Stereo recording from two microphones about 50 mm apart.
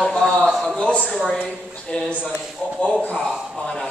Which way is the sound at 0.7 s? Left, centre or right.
Centre.